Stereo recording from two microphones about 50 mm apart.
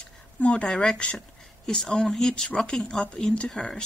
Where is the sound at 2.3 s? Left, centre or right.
Centre.